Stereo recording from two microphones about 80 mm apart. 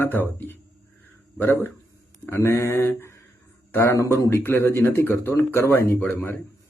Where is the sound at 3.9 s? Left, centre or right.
Right.